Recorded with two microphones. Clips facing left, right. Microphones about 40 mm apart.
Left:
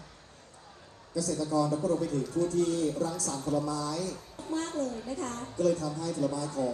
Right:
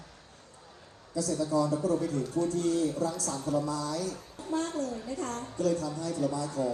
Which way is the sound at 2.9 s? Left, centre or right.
Right.